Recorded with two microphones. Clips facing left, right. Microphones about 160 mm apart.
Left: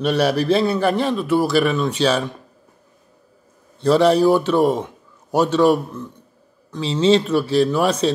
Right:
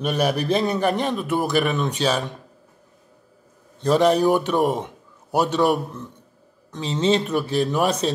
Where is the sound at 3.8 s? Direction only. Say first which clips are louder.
Left 3 dB; 10° right (ahead or behind).